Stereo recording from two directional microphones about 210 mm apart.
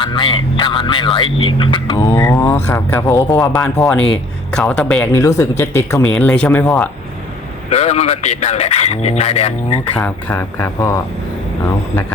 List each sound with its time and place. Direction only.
0.0 s speech: 25° left (ahead or behind)
3.8 s speech: 5° left (ahead or behind)
7.7 s speech: 30° left (ahead or behind)
9.9 s speech: 5° left (ahead or behind)